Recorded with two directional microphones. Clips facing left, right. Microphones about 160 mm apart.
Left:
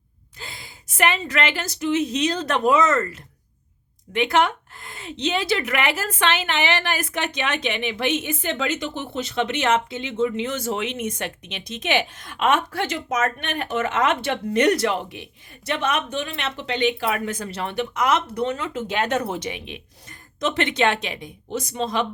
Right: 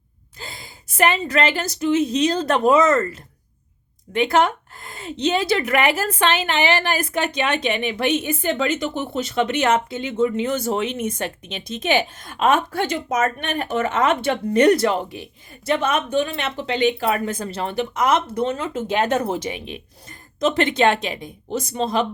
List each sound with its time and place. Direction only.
0.3 s a woman's voice: 35° right (ahead or behind)